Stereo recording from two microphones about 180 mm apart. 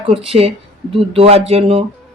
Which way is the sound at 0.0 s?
30° right (ahead or behind).